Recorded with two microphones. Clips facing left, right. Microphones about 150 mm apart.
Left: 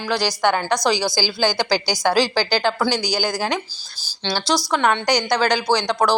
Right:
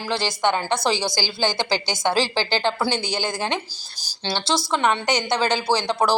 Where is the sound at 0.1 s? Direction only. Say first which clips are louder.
Left 3 dB; 25° right (ahead or behind).